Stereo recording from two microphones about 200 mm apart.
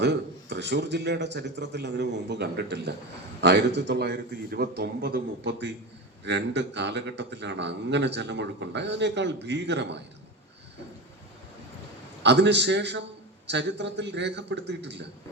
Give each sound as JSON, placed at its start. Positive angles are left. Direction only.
{"t": 0.0, "sound": "a man's voice", "side_deg": -60}
{"t": 12.2, "sound": "a man's voice", "side_deg": -60}